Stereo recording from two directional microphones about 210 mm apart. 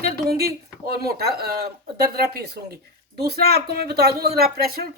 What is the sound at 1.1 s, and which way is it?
Speech, 50° right (ahead or behind).